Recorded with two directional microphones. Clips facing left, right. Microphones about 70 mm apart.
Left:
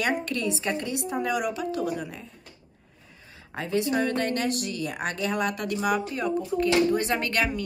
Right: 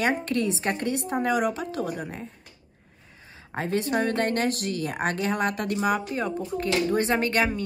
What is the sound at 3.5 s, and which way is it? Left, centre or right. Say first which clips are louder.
A woman's voice: even; right.